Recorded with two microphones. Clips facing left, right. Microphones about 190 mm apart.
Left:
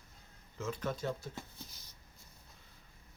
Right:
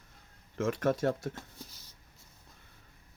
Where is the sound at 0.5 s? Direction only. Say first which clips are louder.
Right 9 dB; 80° right.